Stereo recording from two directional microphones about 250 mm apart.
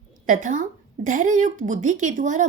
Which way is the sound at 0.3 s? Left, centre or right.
Right.